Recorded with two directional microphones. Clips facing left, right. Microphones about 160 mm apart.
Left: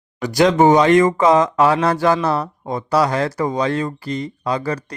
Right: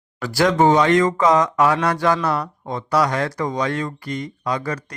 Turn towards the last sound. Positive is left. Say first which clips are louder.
# left 3 dB
turn(degrees=30)  # may be behind; listen again after turning